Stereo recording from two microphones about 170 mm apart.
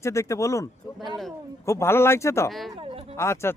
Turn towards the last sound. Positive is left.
turn(degrees=15)  # may be behind; listen again after turning